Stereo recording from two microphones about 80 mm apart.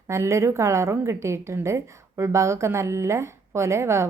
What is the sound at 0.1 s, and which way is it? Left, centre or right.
A woman's voice, right.